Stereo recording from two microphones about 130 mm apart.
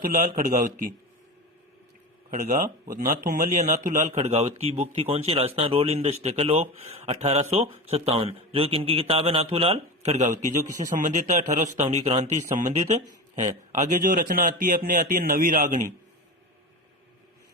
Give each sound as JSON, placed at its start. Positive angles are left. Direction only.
{"t": 0.0, "sound": "a man's voice", "side_deg": -90}
{"t": 2.3, "sound": "speech", "side_deg": -90}
{"t": 13.7, "sound": "a man's voice", "side_deg": -90}